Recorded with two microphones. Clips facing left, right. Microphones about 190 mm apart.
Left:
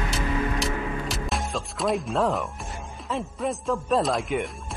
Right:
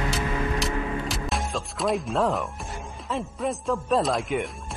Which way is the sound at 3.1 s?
Centre (ahead or behind).